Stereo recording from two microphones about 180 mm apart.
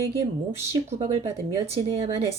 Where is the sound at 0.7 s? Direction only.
35° right (ahead or behind).